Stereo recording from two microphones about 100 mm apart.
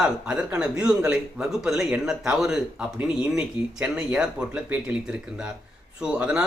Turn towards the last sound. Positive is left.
turn(degrees=-10)  # may be behind; listen again after turning